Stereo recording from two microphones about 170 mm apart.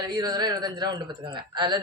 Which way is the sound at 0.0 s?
25° right (ahead or behind).